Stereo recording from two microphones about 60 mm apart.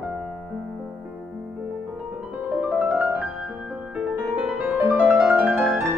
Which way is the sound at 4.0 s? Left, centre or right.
Centre.